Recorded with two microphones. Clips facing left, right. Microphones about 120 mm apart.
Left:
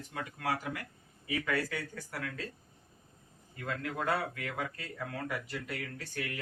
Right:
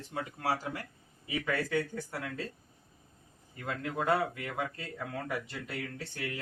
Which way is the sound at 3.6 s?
20° right (ahead or behind).